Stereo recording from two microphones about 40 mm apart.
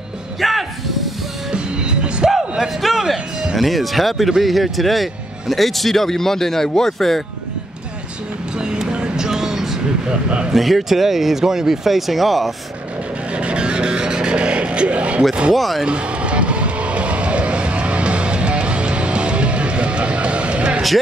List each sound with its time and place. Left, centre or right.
0.4 s speech: centre
1.5 s music: right
2.8 s a sound: centre
3.5 s speech: centre
8.5 s a sound: right
10.2 s speech: right
10.5 s speech: centre
13.4 s music: right
15.5 s speech: centre
15.8 s vehicle: right